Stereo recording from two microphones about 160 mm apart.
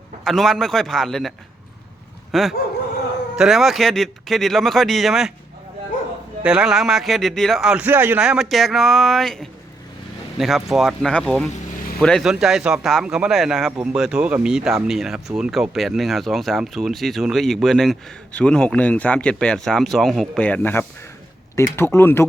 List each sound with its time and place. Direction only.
0.3 s speech: centre (ahead or behind)
2.3 s speech: centre (ahead or behind)
6.4 s speech: 5° right (ahead or behind); by 22.3 s 15° left (ahead or behind)